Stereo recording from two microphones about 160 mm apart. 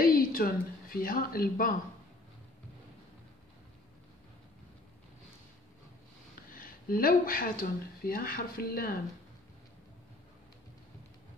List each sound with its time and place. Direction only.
0.0 s a woman's voice: 65° left (ahead or behind)
6.5 s speech: 60° left (ahead or behind)